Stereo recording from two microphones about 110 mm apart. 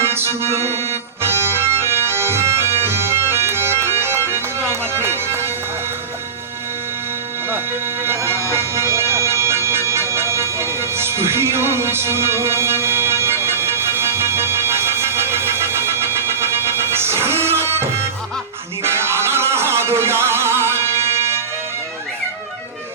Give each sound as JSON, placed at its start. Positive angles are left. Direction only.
{"t": 0.0, "sound": "music", "side_deg": -20}
{"t": 8.0, "sound": "music", "side_deg": -20}